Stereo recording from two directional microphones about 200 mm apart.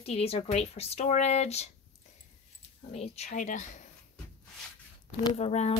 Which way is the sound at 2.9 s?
30° left (ahead or behind).